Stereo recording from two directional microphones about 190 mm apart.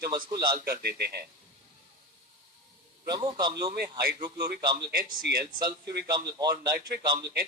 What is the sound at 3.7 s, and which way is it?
Speech, 55° right (ahead or behind).